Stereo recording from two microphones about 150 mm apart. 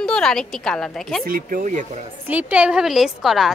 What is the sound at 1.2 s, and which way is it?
Speech, 70° right (ahead or behind).